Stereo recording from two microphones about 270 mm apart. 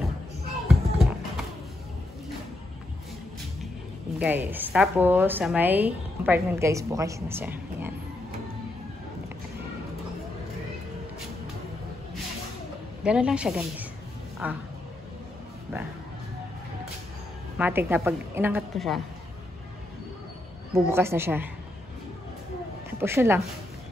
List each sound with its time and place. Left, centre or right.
0.7 s a sound: centre
4.2 s a woman's voice: centre
13.0 s a woman's voice: centre
17.6 s a woman's voice: centre
20.7 s a woman's voice: centre
22.8 s speech: centre